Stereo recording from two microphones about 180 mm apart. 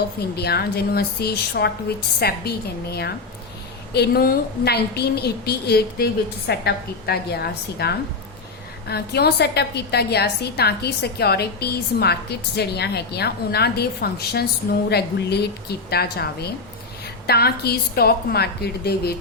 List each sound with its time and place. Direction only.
0.2 s a woman's voice: 65° left (ahead or behind)